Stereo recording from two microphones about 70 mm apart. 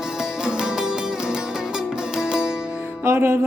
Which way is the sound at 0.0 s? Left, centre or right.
Centre.